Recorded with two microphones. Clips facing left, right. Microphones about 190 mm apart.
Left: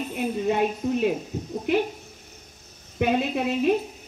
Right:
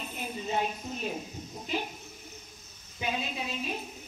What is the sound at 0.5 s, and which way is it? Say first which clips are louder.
A woman's voice: left 8 dB; 65° left (ahead or behind).